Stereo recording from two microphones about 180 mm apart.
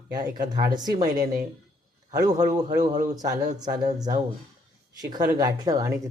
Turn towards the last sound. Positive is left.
turn(degrees=-20)  # may be behind; listen again after turning